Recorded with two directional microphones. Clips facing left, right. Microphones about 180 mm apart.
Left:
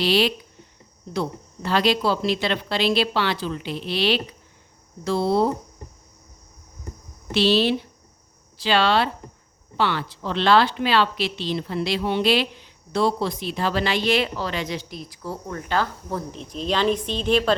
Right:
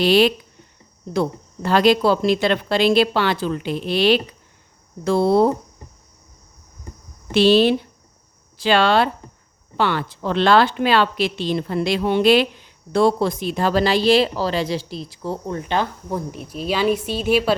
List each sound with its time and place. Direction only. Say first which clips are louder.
0.0 s speech: right 5 dB; 50° right (ahead or behind)
7.3 s speech: right 5 dB; 50° right (ahead or behind); by 17.6 s 10° right (ahead or behind)